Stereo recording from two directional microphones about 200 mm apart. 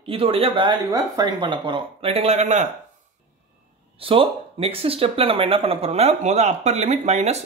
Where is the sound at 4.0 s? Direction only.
25° right (ahead or behind).